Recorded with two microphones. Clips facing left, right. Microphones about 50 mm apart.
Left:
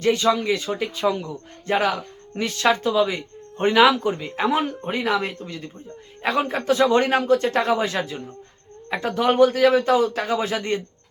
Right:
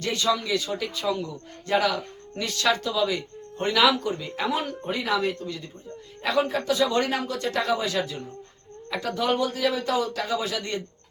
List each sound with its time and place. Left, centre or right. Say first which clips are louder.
0.0 s a man's voice: left 6 dB; left